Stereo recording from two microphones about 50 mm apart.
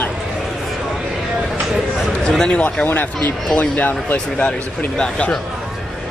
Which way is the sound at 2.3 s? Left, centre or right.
Centre.